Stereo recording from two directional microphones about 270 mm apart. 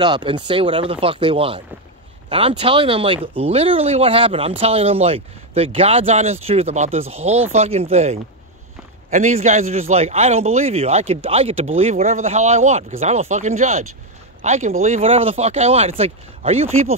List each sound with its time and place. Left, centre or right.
0.0 s speech: centre